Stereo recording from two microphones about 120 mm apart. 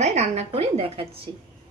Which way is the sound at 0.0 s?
70° right (ahead or behind).